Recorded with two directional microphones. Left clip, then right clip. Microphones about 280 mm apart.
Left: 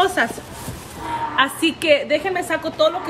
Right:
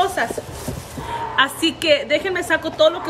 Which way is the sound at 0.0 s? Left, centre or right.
Left.